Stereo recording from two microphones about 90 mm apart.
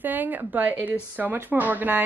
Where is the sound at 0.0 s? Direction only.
20° right (ahead or behind).